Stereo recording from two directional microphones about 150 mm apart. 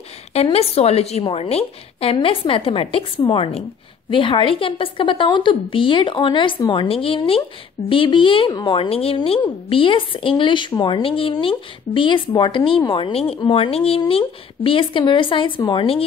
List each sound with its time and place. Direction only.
0.3 s a woman's voice: 40° left (ahead or behind)
8.7 s speech: 40° left (ahead or behind)